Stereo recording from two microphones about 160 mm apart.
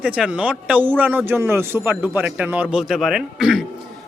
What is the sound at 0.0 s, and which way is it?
A man's voice, 5° right (ahead or behind).